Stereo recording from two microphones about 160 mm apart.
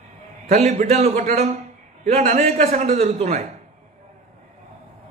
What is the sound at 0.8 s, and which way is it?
A man's voice, 45° right (ahead or behind).